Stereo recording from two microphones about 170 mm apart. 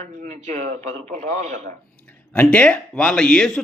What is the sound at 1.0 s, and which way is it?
Speech, 45° right (ahead or behind).